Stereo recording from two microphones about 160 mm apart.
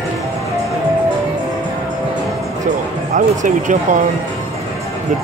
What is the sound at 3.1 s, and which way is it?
Speech, 50° right (ahead or behind).